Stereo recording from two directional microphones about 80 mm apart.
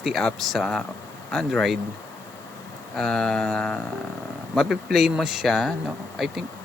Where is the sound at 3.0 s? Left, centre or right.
Centre.